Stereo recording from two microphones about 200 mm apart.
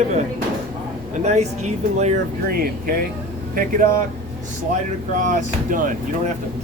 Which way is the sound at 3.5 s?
45° right (ahead or behind).